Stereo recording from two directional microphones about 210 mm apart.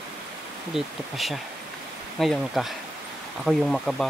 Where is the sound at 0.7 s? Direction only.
Centre (ahead or behind).